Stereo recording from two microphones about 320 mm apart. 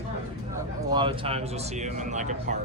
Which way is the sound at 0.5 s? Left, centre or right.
Centre.